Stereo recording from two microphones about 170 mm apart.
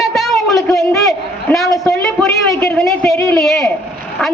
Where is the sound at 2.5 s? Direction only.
15° left (ahead or behind).